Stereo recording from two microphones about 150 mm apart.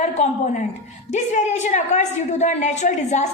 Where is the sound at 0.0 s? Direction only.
50° left (ahead or behind).